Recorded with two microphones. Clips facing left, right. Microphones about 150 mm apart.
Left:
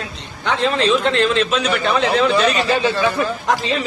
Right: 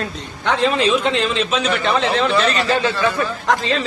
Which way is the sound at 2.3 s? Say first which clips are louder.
Left 1 dB; 15° left (ahead or behind).